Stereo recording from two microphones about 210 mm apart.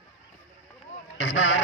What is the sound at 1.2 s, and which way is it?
Speech, 75° left (ahead or behind).